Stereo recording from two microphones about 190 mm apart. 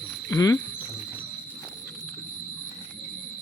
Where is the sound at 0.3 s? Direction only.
15° left (ahead or behind).